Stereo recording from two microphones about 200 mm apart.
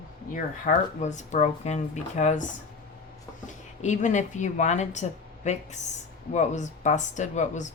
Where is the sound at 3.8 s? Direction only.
35° left (ahead or behind).